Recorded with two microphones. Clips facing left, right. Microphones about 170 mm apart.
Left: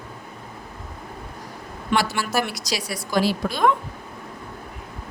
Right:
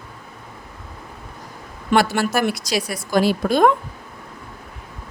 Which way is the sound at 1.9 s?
55° right (ahead or behind).